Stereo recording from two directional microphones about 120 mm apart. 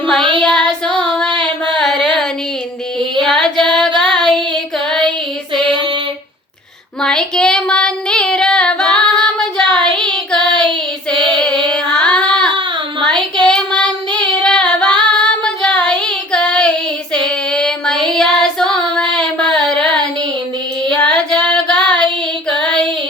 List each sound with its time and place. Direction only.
0.2 s child singing: 45° right (ahead or behind)
0.4 s child singing: 5° left (ahead or behind)
3.2 s child singing: 5° left (ahead or behind)
4.9 s female singing: 5° left (ahead or behind)
7.0 s female singing: 5° left (ahead or behind)
11.7 s child singing: 10° left (ahead or behind)
19.1 s a sound: 5° left (ahead or behind)
20.8 s child singing: 10° left (ahead or behind)